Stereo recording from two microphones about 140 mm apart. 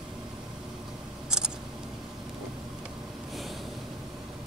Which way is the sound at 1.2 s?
5° right (ahead or behind).